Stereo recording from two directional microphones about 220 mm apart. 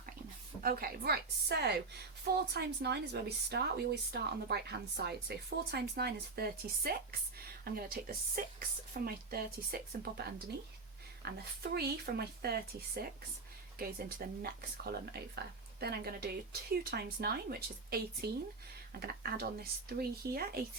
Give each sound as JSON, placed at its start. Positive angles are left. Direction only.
{"t": 0.6, "sound": "a woman's voice", "side_deg": -40}
{"t": 14.4, "sound": "a woman's voice", "side_deg": -45}